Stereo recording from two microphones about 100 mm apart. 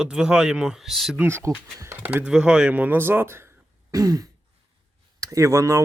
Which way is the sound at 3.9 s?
35° right (ahead or behind).